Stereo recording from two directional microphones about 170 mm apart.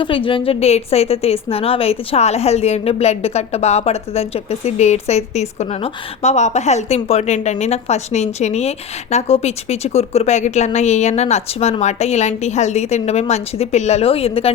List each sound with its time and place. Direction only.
0.0 s a woman's voice: 30° left (ahead or behind)